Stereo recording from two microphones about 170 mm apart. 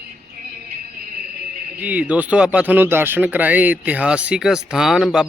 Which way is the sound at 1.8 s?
10° right (ahead or behind).